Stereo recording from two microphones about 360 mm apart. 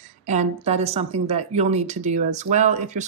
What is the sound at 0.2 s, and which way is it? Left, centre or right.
A woman's voice, centre.